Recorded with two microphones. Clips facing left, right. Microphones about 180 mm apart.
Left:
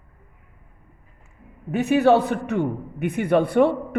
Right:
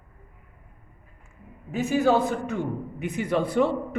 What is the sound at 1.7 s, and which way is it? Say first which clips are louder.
A man's voice: left 5 dB; 65° left (ahead or behind).